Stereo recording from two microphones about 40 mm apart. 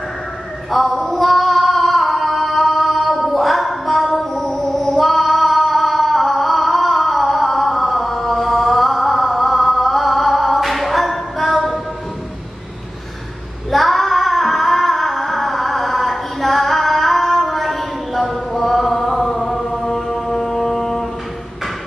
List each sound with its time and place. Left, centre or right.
0.9 s female singing: left
1.2 s female singing: centre
2.1 s a sound: centre
3.3 s music: centre
4.2 s music: centre
4.5 s child singing: left
4.9 s female singing: centre
7.3 s chant: centre
10.3 s music: centre
13.7 s female singing: centre
18.7 s chant: centre
20.1 s a sound: centre